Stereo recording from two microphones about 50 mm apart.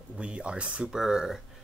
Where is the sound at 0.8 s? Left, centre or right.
Centre.